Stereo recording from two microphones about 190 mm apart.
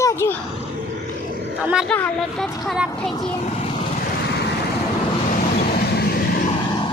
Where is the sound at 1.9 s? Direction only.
5° left (ahead or behind).